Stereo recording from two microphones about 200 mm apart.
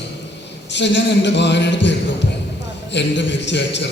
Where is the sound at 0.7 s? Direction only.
60° left (ahead or behind).